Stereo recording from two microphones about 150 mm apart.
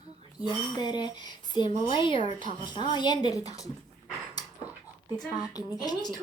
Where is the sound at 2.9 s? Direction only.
30° left (ahead or behind).